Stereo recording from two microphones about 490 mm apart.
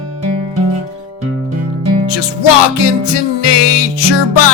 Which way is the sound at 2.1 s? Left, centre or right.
Left.